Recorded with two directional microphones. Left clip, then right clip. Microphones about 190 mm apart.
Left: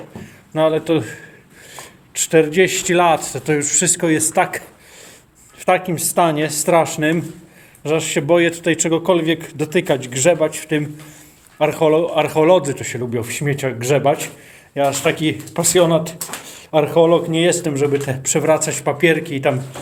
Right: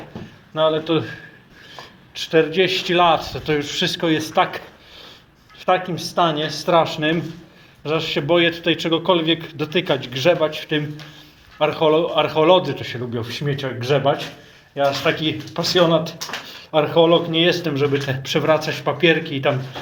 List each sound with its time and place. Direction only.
0.5 s speech: 40° left (ahead or behind)
2.3 s speech: 40° left (ahead or behind)
5.9 s speech: 45° left (ahead or behind)
6.7 s speech: 35° left (ahead or behind)
17.8 s speech: 20° left (ahead or behind)